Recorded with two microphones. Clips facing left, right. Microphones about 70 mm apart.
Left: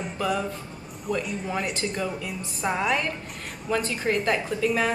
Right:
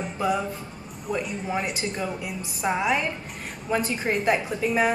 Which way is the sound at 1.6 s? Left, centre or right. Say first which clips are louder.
Even; centre.